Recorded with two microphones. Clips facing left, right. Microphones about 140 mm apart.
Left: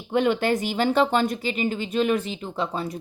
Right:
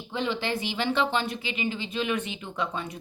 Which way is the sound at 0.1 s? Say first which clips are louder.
Left 8 dB; 55° left (ahead or behind).